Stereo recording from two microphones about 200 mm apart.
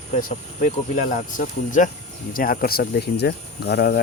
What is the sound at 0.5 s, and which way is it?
Speech, 40° left (ahead or behind).